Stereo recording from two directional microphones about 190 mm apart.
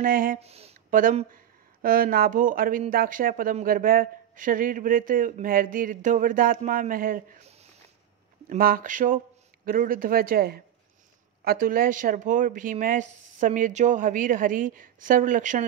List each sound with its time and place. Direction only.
0.0 s speech: 45° right (ahead or behind)
0.4 s speech: 35° right (ahead or behind)
8.5 s speech: 50° right (ahead or behind)